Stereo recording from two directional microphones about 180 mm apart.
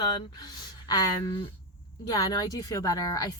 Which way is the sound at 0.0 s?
25° left (ahead or behind).